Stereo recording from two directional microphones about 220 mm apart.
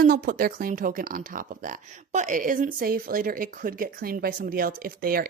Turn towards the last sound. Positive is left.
turn(degrees=-40)  # may be behind; listen again after turning